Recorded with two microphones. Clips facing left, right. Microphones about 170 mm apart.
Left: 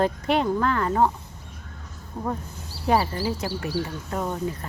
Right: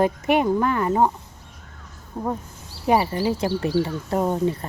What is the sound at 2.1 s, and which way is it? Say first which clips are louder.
Speech: right 3 dB; centre (ahead or behind).